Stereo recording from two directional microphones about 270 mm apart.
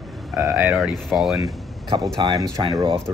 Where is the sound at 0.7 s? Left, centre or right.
Centre.